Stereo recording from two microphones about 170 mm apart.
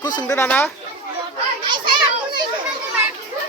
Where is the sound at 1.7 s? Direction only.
30° right (ahead or behind).